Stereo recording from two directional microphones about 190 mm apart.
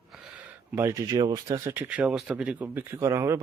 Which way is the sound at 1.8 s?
5° right (ahead or behind).